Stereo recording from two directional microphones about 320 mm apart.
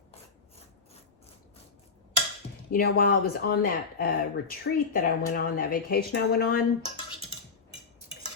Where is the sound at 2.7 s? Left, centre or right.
Left.